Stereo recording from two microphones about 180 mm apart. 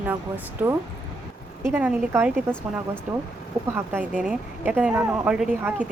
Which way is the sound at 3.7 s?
10° right (ahead or behind).